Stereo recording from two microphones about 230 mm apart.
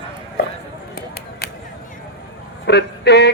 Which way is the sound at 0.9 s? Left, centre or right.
Left.